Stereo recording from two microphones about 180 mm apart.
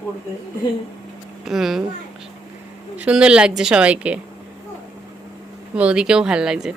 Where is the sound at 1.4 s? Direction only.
Centre (ahead or behind).